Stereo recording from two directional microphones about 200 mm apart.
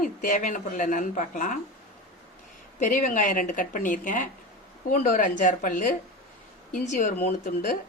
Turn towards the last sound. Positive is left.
turn(degrees=40)  # may be behind; listen again after turning